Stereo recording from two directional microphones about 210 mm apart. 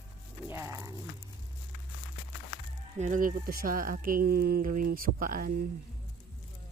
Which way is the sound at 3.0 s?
40° right (ahead or behind).